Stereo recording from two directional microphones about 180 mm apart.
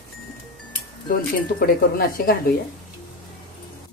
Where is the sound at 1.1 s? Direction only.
55° left (ahead or behind).